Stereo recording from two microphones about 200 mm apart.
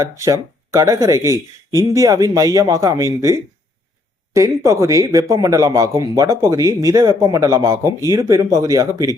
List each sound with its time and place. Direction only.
0.0 s speech: 15° right (ahead or behind)